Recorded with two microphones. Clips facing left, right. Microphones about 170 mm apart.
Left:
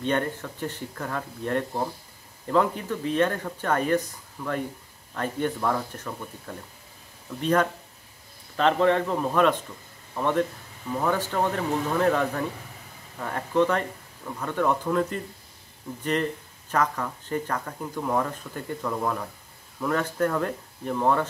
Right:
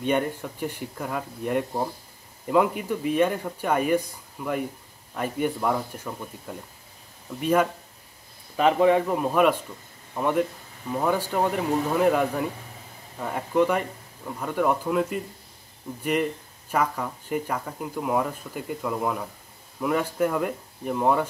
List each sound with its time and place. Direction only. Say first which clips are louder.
0.0 s speech: right 2 dB; 10° right (ahead or behind)